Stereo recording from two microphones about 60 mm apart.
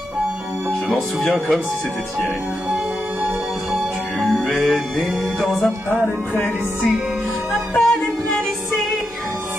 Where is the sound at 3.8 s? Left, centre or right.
Centre.